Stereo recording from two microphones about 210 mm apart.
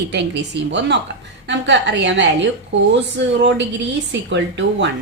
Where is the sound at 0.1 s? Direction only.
55° right (ahead or behind).